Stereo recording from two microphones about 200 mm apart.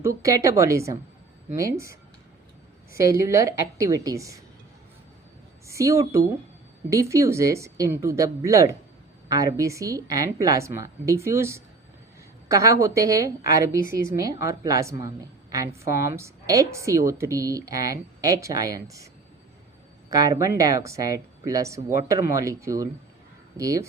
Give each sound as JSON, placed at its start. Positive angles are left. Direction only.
{"t": 0.2, "sound": "a woman's voice", "side_deg": -15}
{"t": 2.9, "sound": "a woman's voice", "side_deg": -15}
{"t": 5.6, "sound": "a woman's voice", "side_deg": -15}
{"t": 20.1, "sound": "a woman's voice", "side_deg": -20}